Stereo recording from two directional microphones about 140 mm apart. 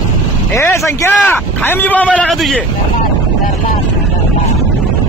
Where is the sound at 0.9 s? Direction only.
15° left (ahead or behind).